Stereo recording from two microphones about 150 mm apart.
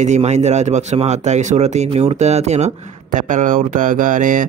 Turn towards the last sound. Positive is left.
turn(degrees=-60)  # may be behind; listen again after turning